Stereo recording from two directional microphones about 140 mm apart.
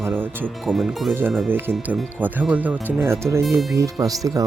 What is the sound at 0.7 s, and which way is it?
Speech, centre (ahead or behind).